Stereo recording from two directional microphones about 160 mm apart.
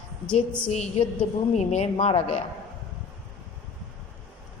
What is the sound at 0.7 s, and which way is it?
A woman's voice, 45° left (ahead or behind).